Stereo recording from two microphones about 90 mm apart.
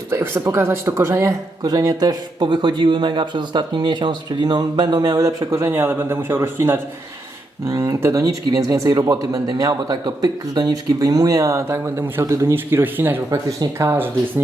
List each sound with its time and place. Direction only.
0.1 s speech: 30° right (ahead or behind)
1.6 s speech: 45° right (ahead or behind)
11.8 s speech: 25° right (ahead or behind)